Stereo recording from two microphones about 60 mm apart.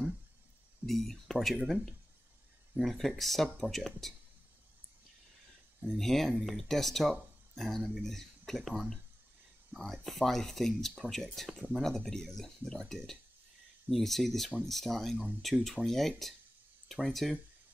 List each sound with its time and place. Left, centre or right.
0.8 s speech: centre
5.9 s speech: centre
9.8 s speech: centre